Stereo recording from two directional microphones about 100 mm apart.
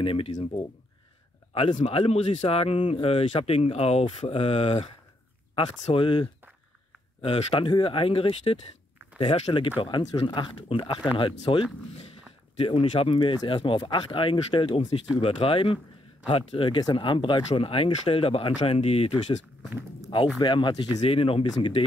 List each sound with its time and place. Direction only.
0.0 s speech: 70° left (ahead or behind)
5.6 s speech: 60° left (ahead or behind)
12.5 s speech: 70° left (ahead or behind); by 19.3 s 85° left
20.3 s speech: 50° left (ahead or behind)
21.0 s speech: 70° left (ahead or behind)